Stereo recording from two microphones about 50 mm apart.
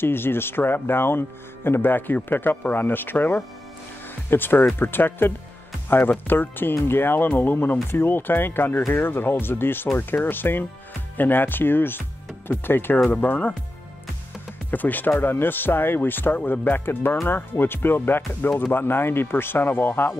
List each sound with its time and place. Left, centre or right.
0.0 s speech: left
13.1 s speech: left
14.7 s speech: left
15.0 s speech: left